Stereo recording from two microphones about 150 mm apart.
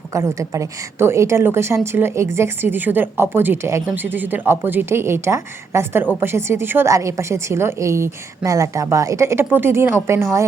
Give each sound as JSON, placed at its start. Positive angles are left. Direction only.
{"t": 0.1, "sound": "a woman's voice", "side_deg": -20}